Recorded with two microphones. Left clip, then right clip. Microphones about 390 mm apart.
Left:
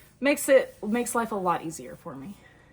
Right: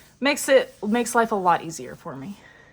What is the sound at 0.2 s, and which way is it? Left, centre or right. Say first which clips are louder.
Speech: right 2 dB; right.